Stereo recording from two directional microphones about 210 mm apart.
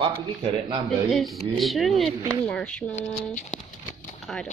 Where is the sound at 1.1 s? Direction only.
Centre (ahead or behind).